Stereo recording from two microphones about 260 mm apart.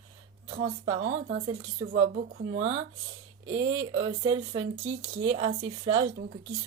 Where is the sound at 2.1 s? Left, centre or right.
Right.